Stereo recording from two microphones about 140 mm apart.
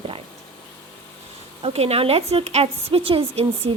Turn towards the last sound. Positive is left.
turn(degrees=-45)  # may be behind; listen again after turning